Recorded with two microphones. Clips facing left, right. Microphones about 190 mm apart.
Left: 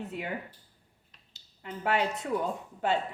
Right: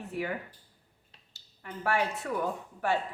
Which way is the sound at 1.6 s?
20° left (ahead or behind).